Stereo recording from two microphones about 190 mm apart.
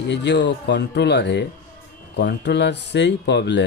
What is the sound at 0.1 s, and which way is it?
Speech, 65° left (ahead or behind).